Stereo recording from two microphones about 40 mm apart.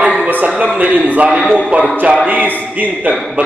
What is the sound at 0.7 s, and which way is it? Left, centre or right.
A man's voice, right.